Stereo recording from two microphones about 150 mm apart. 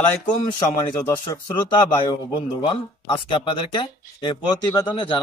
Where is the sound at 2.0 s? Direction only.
35° left (ahead or behind).